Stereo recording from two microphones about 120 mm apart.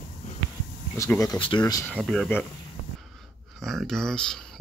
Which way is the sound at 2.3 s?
20° left (ahead or behind).